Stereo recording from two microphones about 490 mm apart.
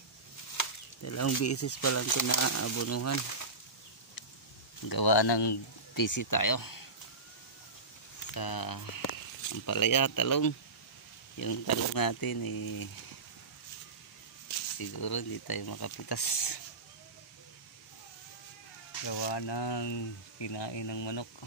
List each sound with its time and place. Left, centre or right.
0.6 s speech: left
4.8 s speech: left
6.0 s speech: left
8.3 s speech: left
14.8 s speech: left
19.0 s speech: left